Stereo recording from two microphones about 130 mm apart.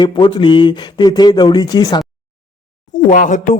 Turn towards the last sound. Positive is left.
turn(degrees=80)